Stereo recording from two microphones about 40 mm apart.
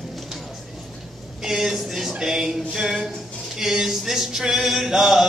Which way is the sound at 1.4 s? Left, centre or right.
Centre.